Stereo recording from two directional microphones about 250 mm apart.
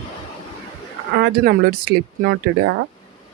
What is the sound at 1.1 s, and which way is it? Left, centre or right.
Speech, right.